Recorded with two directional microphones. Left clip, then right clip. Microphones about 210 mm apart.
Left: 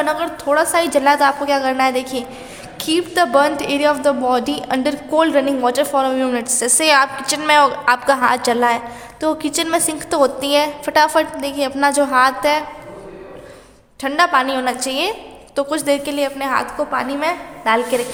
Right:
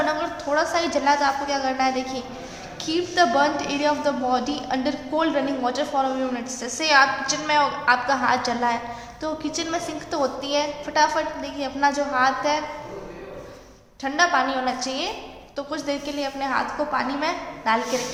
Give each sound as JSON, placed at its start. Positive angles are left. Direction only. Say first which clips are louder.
{"t": 0.0, "sound": "a woman's voice", "louder": "left 5 dB", "side_deg": 50}
{"t": 14.0, "sound": "a woman's voice", "louder": "left 5 dB", "side_deg": 55}